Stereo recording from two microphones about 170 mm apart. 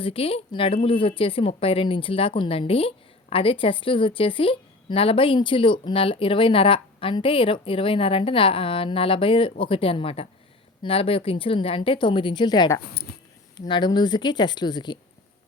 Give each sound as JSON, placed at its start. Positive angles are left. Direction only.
{"t": 0.0, "sound": "a woman's voice", "side_deg": 35}
{"t": 13.1, "sound": "speech", "side_deg": 70}
{"t": 13.6, "sound": "a woman's voice", "side_deg": 25}